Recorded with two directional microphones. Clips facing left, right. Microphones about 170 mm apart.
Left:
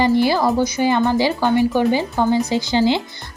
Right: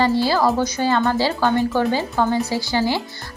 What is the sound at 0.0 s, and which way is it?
A woman's voice, 15° left (ahead or behind).